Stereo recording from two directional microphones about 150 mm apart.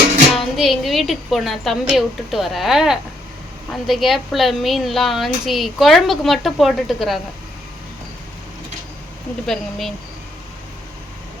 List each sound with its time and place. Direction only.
0.5 s a woman's voice: centre (ahead or behind)
9.5 s a woman's voice: centre (ahead or behind)